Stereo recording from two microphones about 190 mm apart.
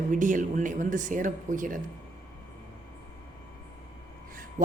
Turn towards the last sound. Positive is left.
turn(degrees=-40)  # may be behind; listen again after turning